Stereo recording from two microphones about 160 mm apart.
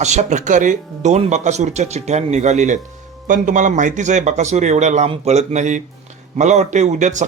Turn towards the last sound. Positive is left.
turn(degrees=-50)  # may be behind; listen again after turning